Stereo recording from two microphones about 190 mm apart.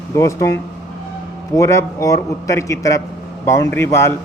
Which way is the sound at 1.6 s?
15° left (ahead or behind).